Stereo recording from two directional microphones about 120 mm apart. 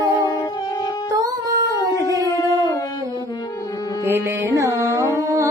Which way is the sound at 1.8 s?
30° left (ahead or behind).